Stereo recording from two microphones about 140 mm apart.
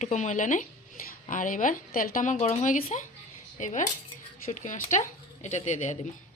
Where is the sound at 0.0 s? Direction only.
60° left (ahead or behind).